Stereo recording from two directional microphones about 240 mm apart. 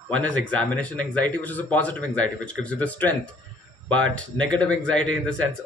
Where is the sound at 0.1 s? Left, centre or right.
Centre.